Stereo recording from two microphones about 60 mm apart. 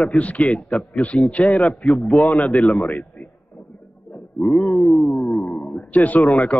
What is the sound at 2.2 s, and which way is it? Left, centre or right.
Speech, centre.